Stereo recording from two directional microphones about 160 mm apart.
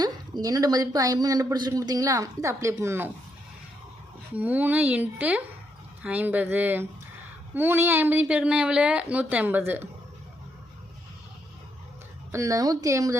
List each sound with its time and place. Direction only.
0.0 s speech: 25° right (ahead or behind)
4.4 s speech: 10° right (ahead or behind)
12.3 s speech: 20° right (ahead or behind)